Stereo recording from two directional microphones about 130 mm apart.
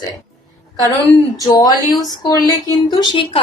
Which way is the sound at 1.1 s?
30° left (ahead or behind).